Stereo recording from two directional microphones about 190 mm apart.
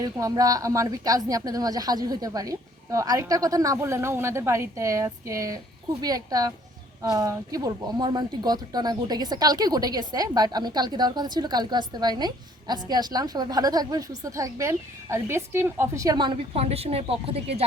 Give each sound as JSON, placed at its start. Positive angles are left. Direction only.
{"t": 0.0, "sound": "a woman's voice", "side_deg": -20}